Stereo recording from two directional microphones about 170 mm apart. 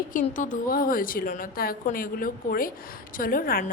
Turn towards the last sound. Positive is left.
turn(degrees=55)  # may be behind; listen again after turning